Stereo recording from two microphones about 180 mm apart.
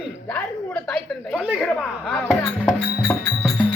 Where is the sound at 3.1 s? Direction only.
5° left (ahead or behind).